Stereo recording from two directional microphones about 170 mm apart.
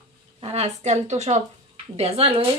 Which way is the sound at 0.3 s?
40° right (ahead or behind).